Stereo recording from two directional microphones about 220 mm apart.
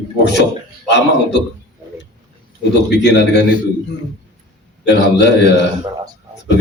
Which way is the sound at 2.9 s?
50° left (ahead or behind).